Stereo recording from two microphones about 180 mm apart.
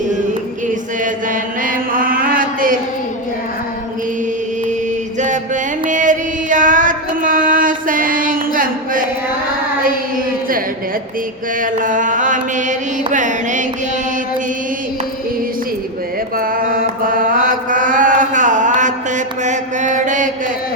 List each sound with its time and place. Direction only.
1.0 s chant: 50° right (ahead or behind)
5.8 s a sound: 45° right (ahead or behind)
11.6 s mantra: 45° right (ahead or behind)
16.4 s mantra: 50° right (ahead or behind)